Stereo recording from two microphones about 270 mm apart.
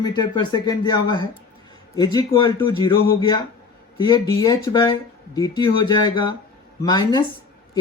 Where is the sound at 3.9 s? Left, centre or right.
Centre.